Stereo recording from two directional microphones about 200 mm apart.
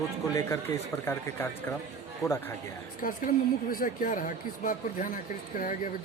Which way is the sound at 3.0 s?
45° left (ahead or behind).